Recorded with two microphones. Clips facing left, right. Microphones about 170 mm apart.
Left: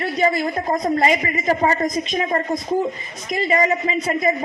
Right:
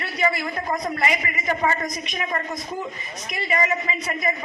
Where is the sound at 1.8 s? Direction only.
25° left (ahead or behind).